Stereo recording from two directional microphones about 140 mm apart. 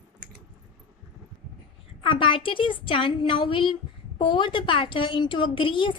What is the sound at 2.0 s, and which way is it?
A woman's voice, 40° left (ahead or behind).